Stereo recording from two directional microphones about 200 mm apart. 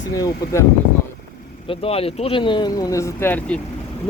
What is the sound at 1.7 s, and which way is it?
Speech, 30° left (ahead or behind).